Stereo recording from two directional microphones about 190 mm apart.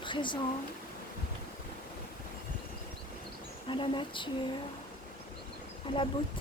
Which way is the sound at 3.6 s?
25° left (ahead or behind).